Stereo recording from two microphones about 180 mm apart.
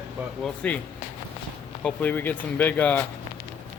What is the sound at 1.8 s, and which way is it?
Speech, 5° left (ahead or behind).